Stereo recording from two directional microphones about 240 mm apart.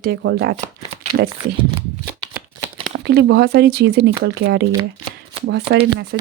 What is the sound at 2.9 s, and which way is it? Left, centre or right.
Speech, right.